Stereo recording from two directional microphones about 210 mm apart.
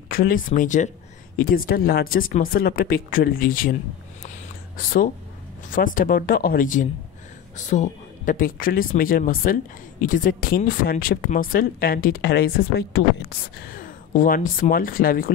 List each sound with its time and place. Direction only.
0.1 s speech: 40° left (ahead or behind)
5.7 s speech: 40° left (ahead or behind)